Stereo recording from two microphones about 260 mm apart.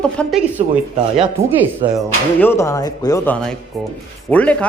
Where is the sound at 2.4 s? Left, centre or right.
Centre.